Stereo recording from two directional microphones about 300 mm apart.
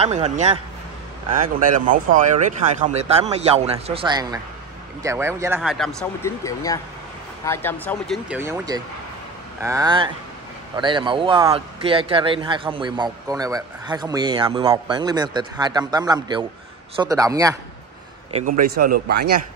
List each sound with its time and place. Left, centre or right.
0.0 s speech: right
18.8 s a man's voice: right